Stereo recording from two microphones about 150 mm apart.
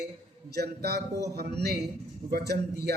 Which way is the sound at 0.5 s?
90° right.